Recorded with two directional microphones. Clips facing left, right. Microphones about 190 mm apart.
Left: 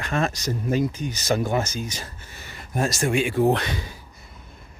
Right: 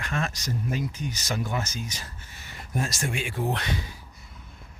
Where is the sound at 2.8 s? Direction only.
90° left.